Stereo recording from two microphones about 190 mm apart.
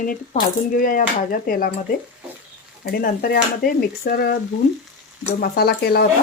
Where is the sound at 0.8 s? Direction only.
45° left (ahead or behind).